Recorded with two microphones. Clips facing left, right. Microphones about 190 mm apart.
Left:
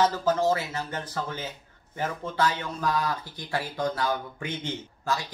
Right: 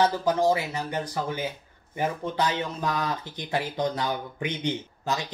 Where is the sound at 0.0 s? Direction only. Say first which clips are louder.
Right 1 dB; 15° right (ahead or behind).